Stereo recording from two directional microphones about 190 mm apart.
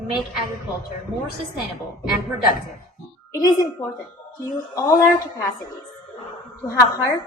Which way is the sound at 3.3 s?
20° left (ahead or behind).